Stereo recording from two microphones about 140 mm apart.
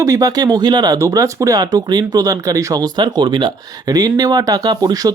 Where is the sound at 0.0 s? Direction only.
25° right (ahead or behind).